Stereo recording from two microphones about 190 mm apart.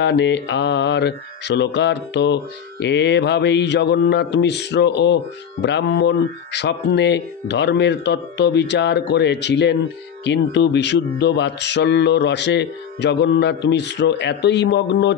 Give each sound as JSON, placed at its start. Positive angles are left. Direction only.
{"t": 0.0, "sound": "mantra", "side_deg": 65}